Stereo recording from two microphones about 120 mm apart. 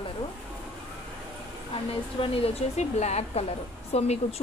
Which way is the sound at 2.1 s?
50° left (ahead or behind).